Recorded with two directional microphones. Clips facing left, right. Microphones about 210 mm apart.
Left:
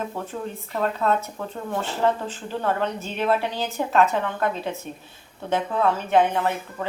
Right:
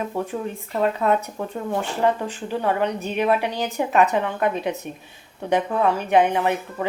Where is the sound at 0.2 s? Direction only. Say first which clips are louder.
Right 4 dB; 15° right (ahead or behind).